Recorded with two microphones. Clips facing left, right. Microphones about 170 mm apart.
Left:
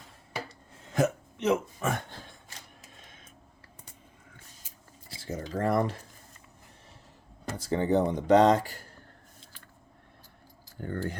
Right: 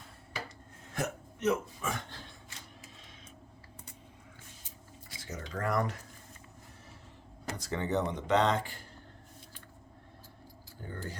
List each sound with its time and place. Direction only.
0.9 s speech: 90° left
5.0 s speech: 30° left (ahead or behind)
7.5 s speech: 30° left (ahead or behind)
10.8 s speech: 60° left (ahead or behind)